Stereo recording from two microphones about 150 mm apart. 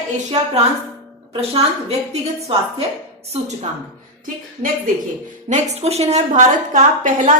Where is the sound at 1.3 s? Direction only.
40° right (ahead or behind).